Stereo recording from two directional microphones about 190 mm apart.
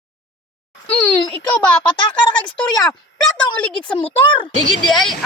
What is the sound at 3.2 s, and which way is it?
Speech, 5° left (ahead or behind).